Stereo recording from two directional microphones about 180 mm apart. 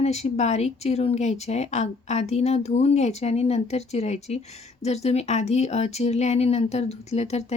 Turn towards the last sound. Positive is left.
turn(degrees=35)  # may be behind; listen again after turning